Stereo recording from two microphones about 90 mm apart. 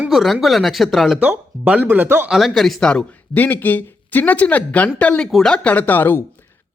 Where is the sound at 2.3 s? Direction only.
Centre (ahead or behind).